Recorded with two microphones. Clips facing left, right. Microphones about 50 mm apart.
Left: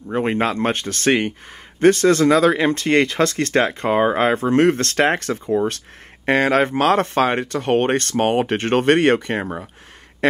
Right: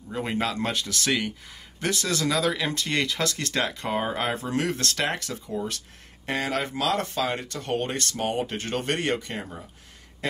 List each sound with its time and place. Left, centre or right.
0.1 s speech: left